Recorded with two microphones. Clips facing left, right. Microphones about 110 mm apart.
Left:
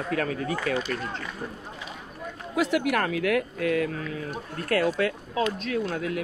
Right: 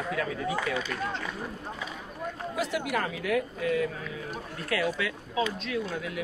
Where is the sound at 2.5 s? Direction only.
65° left (ahead or behind).